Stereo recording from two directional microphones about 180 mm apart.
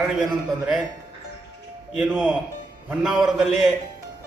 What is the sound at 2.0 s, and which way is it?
A man's voice, 5° right (ahead or behind).